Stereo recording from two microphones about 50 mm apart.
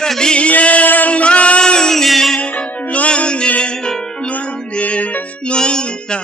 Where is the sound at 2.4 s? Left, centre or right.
Left.